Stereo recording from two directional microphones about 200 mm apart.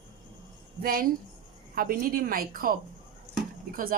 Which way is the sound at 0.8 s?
45° right (ahead or behind).